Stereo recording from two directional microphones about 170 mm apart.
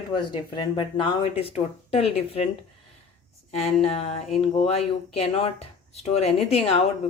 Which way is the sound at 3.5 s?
35° left (ahead or behind).